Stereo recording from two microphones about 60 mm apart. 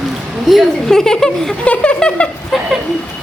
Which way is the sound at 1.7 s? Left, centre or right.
Centre.